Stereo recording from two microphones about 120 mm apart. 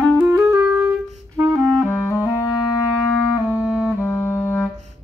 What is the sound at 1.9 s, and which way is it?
Clarinet, 20° left (ahead or behind).